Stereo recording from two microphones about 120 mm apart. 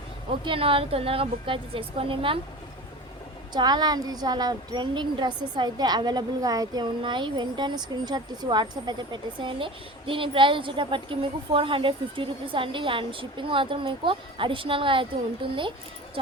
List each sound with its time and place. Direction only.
0.3 s a woman's voice: 50° right (ahead or behind)
3.5 s a woman's voice: 35° right (ahead or behind)